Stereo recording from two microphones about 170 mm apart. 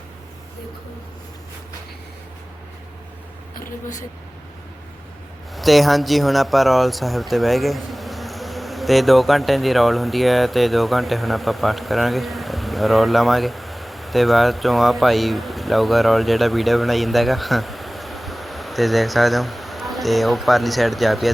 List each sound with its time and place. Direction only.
5.5 s speech: centre (ahead or behind)